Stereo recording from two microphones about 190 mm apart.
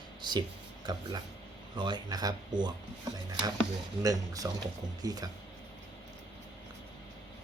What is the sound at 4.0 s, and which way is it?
Speech, 20° right (ahead or behind).